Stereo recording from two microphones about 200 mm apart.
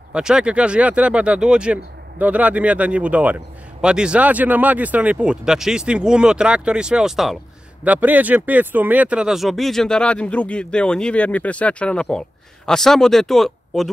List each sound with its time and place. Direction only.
0.1 s speech: 5° right (ahead or behind)